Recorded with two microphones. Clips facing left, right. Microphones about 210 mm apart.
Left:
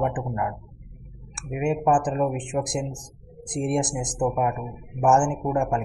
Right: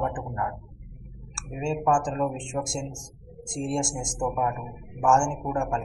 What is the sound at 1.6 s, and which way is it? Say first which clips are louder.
Speech: left 3 dB; 20° left (ahead or behind).